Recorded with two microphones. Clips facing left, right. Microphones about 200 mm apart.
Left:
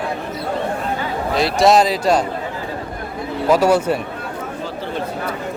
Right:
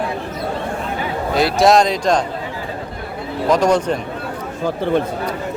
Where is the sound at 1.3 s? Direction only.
Centre (ahead or behind).